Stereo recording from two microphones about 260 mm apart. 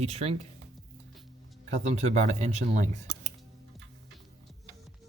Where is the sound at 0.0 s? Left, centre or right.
Right.